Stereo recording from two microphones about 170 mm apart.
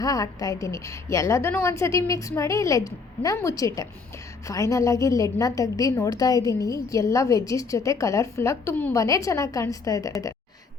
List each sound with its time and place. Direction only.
0.0 s a woman's voice: 20° left (ahead or behind)